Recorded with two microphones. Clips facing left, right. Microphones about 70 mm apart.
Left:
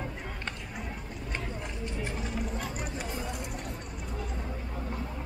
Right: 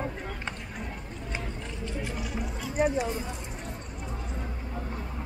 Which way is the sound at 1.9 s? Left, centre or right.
Left.